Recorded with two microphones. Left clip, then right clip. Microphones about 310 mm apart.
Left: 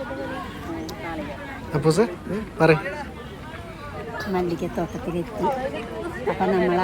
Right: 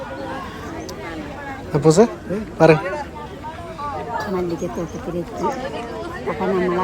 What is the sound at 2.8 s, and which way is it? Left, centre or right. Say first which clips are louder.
Speech: right 5 dB; right.